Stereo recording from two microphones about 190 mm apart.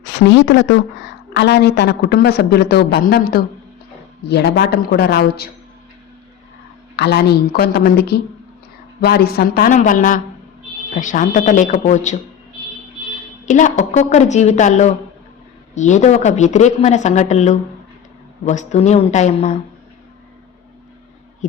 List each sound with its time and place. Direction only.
0.0 s speech: 70° left (ahead or behind)
1.4 s speech: 65° left (ahead or behind)
6.9 s speech: 60° left (ahead or behind); by 12.1 s 40° left (ahead or behind)
13.4 s speech: 40° left (ahead or behind)